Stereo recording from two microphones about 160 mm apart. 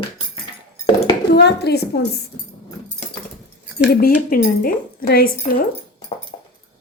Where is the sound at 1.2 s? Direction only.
90° left.